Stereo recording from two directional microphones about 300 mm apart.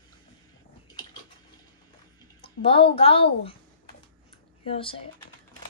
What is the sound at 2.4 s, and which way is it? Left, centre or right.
A woman's voice, centre.